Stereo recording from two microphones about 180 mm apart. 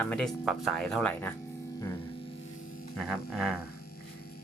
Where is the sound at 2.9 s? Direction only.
Centre (ahead or behind).